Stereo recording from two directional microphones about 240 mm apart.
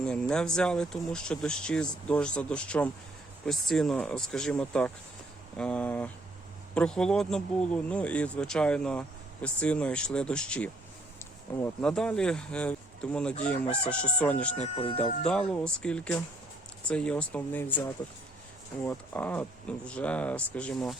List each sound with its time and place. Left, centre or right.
0.0 s speech: centre
14.6 s speech: left
15.2 s speech: centre